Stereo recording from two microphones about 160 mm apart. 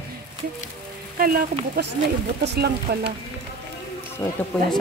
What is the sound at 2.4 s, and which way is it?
Speech, 90° right.